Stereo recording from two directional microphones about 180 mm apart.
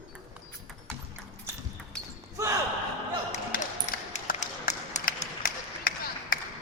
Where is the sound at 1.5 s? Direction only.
15° right (ahead or behind).